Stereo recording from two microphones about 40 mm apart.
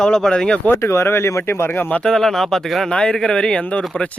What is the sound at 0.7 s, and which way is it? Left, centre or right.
Speech, left.